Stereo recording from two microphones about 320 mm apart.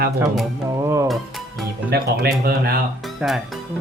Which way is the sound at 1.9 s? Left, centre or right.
Right.